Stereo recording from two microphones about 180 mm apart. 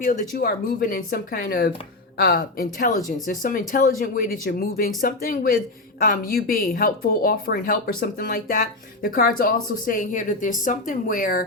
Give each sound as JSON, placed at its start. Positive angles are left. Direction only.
{"t": 0.0, "sound": "speech", "side_deg": 50}